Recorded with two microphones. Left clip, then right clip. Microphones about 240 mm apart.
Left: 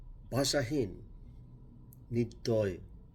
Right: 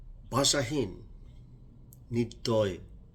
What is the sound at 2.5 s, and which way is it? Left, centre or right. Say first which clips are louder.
Speech: right 4 dB; centre.